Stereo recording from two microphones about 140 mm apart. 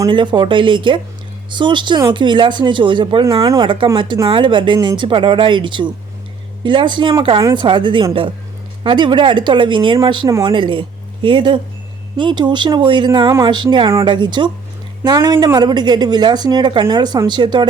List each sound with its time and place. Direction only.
0.1 s a woman's voice: 35° right (ahead or behind)
3.4 s speech: 25° right (ahead or behind)
4.3 s a woman's voice: 35° right (ahead or behind)